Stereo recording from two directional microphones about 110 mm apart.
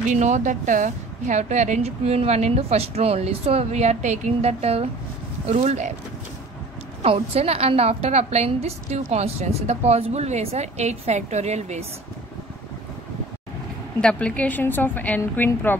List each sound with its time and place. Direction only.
0.1 s a woman's voice: 90° right; by 4.8 s 70° right (ahead or behind)
5.5 s speech: 90° right
7.0 s a woman's voice: 65° right (ahead or behind); by 11.8 s 90° right
14.0 s a woman's voice: 10° left (ahead or behind)